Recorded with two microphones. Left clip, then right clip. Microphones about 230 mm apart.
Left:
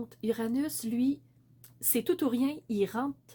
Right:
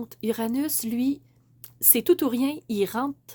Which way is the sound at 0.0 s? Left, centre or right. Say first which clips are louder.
Right 4 dB; right.